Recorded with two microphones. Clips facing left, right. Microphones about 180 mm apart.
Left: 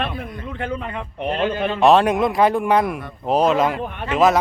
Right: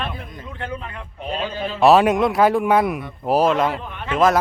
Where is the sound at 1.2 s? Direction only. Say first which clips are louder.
Left 5 dB; 60° left (ahead or behind).